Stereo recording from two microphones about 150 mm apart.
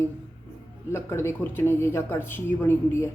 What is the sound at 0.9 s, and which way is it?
A woman's voice, 15° left (ahead or behind).